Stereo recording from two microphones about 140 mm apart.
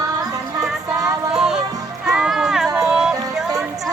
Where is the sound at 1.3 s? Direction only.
5° right (ahead or behind).